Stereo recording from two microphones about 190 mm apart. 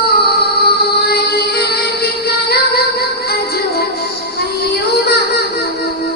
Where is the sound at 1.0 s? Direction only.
55° left (ahead or behind).